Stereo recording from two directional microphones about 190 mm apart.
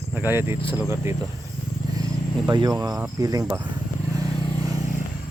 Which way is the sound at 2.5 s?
20° right (ahead or behind).